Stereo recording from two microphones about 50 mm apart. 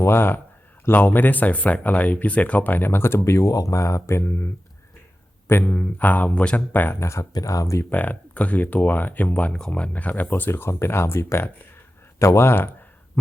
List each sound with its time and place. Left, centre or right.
0.0 s a man's voice: left
3.2 s speech: left
5.5 s speech: left
7.0 s speech: left
7.9 s speech: left
9.5 s speech: centre
9.9 s speech: left
10.5 s speech: left
12.2 s speech: left